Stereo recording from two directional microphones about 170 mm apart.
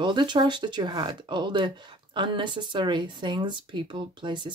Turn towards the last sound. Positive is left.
turn(degrees=-25)  # may be behind; listen again after turning